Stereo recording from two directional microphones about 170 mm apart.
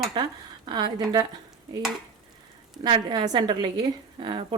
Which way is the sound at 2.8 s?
25° right (ahead or behind).